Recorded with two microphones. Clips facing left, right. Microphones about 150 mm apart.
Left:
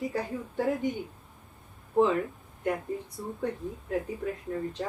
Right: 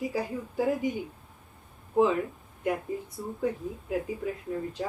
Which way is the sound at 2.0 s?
Centre (ahead or behind).